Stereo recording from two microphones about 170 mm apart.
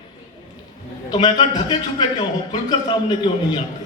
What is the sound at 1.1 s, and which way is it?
A man's voice, 30° left (ahead or behind).